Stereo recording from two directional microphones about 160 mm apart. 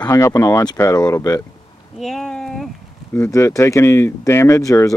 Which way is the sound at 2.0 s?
Centre (ahead or behind).